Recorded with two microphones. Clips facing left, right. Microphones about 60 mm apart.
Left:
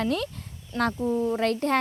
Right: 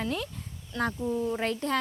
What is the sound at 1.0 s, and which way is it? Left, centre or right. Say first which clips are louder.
Speech: left 4 dB; left.